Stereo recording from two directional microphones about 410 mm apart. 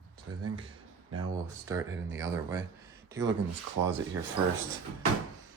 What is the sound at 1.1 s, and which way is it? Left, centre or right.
Speech, centre.